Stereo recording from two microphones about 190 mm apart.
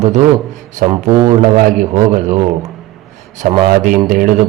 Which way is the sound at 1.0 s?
45° right (ahead or behind).